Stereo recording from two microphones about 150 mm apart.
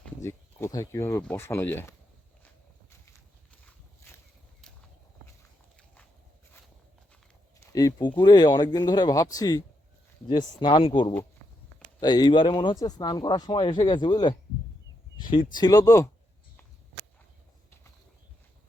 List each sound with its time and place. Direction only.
0.2 s speech: 20° left (ahead or behind)
7.6 s speech: 20° left (ahead or behind)